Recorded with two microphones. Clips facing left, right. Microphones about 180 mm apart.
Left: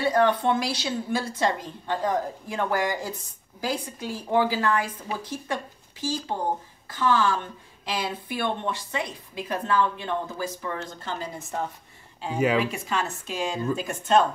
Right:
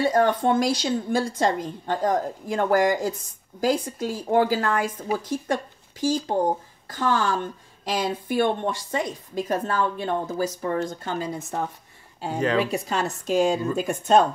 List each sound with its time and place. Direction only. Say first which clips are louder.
0.0 s a woman's voice: right 2 dB; 45° right (ahead or behind)
12.4 s speech: even; 10° left (ahead or behind)
12.7 s a woman's voice: right 3 dB; 40° right (ahead or behind)